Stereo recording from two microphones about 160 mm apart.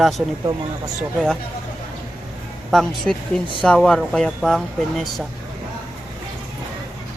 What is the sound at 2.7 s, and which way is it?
Speech, centre (ahead or behind).